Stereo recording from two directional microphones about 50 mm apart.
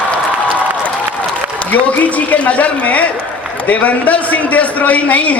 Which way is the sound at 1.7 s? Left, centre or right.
Left.